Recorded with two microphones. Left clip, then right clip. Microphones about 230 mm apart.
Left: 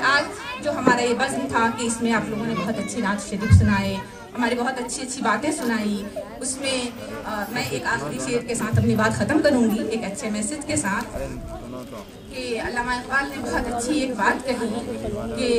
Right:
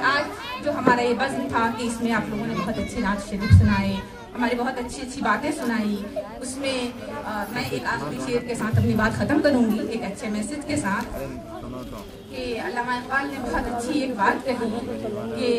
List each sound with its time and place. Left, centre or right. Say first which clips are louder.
0.0 s a sound: left 2 dB; left
3.0 s a woman's voice: left 1 dB; left
12.4 s a woman's voice: left 1 dB; left